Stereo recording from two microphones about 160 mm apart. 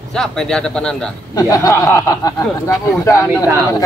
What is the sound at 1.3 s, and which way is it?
Speech, 20° left (ahead or behind).